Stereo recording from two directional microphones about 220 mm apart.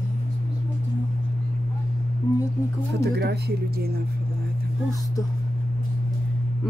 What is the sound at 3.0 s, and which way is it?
Speech, 50° right (ahead or behind).